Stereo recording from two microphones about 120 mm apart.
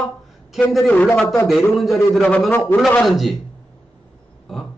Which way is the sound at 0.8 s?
10° left (ahead or behind).